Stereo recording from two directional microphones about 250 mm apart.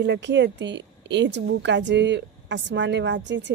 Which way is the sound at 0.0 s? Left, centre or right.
Right.